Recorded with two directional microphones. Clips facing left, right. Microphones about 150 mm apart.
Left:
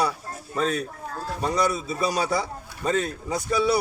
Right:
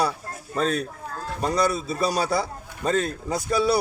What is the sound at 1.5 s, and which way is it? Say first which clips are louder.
Speech: right 2 dB; 30° right (ahead or behind).